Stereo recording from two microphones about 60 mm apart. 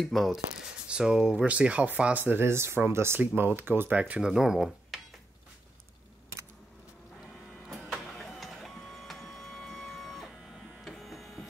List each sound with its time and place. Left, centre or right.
0.0 s speech: centre
0.8 s speech: centre
2.2 s speech: right
3.2 s speech: right
4.2 s speech: centre
7.7 s printer: centre